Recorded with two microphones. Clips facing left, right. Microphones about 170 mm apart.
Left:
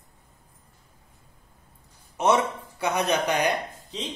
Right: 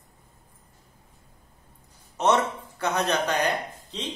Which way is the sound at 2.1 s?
10° left (ahead or behind).